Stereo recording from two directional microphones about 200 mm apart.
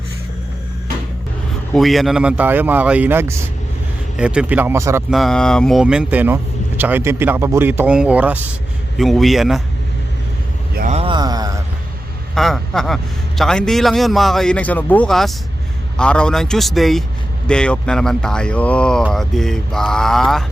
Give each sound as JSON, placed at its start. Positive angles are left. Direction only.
{"t": 1.7, "sound": "speech", "side_deg": 0}
{"t": 5.1, "sound": "a man's voice", "side_deg": 0}
{"t": 10.8, "sound": "a sound", "side_deg": -35}
{"t": 12.3, "sound": "a man's voice", "side_deg": 0}